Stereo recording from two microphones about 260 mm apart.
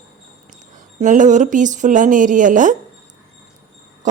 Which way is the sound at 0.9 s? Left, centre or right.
Right.